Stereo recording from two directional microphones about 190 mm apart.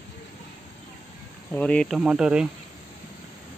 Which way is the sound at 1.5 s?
5° left (ahead or behind).